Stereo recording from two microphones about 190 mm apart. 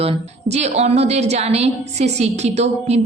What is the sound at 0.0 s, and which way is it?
A woman's voice, 30° right (ahead or behind).